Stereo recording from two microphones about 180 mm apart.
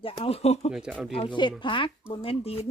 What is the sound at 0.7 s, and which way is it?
Speech, centre (ahead or behind).